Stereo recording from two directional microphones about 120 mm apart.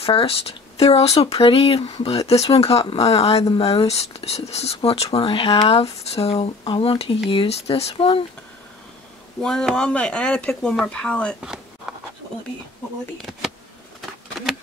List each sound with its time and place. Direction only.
0.0 s speech: 50° left (ahead or behind)
9.4 s speech: 5° left (ahead or behind)
13.2 s speech: centre (ahead or behind)